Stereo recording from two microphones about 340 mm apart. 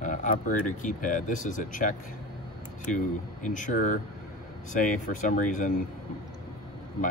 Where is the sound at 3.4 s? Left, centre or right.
Left.